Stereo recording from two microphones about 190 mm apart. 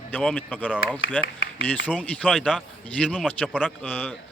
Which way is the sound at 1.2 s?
80° left.